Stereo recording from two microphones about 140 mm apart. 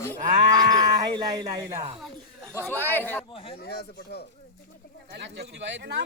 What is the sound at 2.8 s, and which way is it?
Speech, 15° left (ahead or behind).